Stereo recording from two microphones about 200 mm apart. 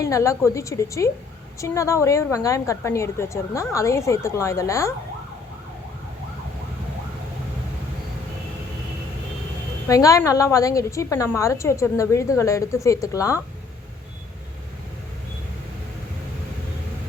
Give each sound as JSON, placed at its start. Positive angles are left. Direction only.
{"t": 0.0, "sound": "a woman's voice", "side_deg": 15}
{"t": 9.9, "sound": "a woman's voice", "side_deg": 15}